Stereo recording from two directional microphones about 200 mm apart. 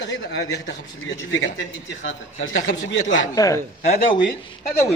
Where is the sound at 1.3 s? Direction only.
70° left (ahead or behind).